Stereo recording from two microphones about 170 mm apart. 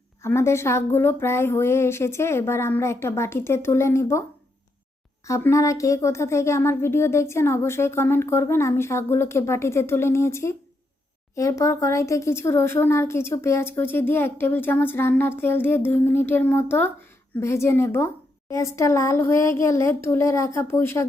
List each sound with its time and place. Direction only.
0.2 s speech: 15° left (ahead or behind)
5.2 s speech: 15° left (ahead or behind)